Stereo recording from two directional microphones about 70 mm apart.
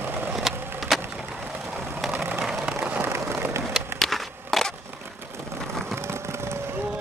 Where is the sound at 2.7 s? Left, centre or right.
Right.